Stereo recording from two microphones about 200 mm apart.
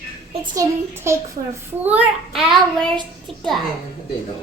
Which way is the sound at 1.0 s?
15° right (ahead or behind).